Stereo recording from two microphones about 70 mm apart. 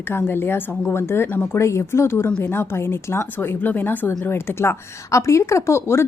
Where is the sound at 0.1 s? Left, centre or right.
Left.